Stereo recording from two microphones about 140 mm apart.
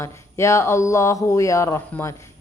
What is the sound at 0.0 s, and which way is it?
Speech, 20° left (ahead or behind).